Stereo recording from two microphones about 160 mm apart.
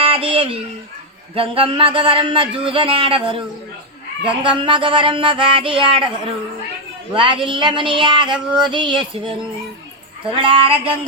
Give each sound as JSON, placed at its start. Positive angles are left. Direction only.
{"t": 0.0, "sound": "a sound", "side_deg": -35}
{"t": 1.4, "sound": "child singing", "side_deg": -35}
{"t": 7.1, "sound": "child singing", "side_deg": -30}
{"t": 10.3, "sound": "child singing", "side_deg": -35}